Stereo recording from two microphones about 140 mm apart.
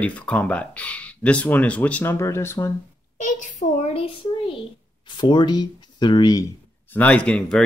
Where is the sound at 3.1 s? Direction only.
65° left (ahead or behind).